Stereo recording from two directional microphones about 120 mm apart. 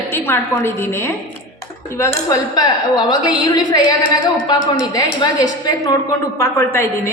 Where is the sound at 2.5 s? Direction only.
35° left (ahead or behind).